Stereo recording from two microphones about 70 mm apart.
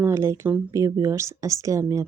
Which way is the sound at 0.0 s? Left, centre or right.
Right.